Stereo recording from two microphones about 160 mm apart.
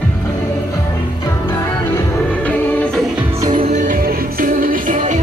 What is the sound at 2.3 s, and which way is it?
Music, 10° left (ahead or behind).